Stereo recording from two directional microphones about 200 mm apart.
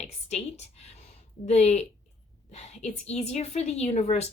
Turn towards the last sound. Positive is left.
turn(degrees=35)  # may be behind; listen again after turning